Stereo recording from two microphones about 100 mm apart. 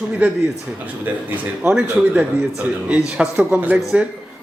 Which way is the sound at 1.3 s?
15° right (ahead or behind).